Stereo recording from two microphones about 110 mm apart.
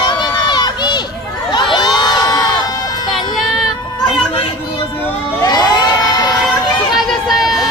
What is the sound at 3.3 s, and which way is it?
Child singing, centre (ahead or behind).